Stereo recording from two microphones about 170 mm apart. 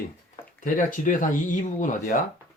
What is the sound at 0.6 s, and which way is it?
Speech, 50° left (ahead or behind).